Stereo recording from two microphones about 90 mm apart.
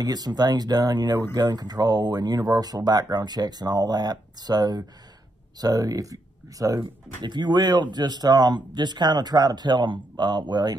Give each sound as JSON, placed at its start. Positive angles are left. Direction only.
{"t": 0.0, "sound": "speech", "side_deg": -50}
{"t": 7.2, "sound": "speech", "side_deg": -55}